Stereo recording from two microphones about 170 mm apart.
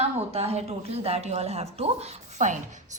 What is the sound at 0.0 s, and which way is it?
A woman's voice, 40° right (ahead or behind).